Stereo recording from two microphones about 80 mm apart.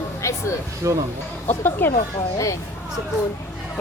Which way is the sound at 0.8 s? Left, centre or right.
Right.